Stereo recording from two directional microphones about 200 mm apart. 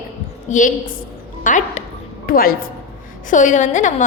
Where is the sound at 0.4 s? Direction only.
40° left (ahead or behind).